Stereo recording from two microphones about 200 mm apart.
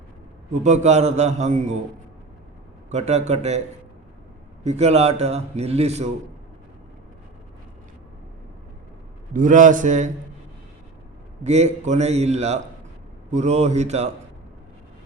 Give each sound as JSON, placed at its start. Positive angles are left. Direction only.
{"t": 0.5, "sound": "a man's voice", "side_deg": -35}
{"t": 2.9, "sound": "a man's voice", "side_deg": -35}
{"t": 4.6, "sound": "a man's voice", "side_deg": -35}
{"t": 9.3, "sound": "a man's voice", "side_deg": -40}
{"t": 11.4, "sound": "a man's voice", "side_deg": -35}